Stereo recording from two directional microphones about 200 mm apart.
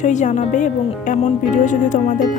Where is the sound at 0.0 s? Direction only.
35° left (ahead or behind).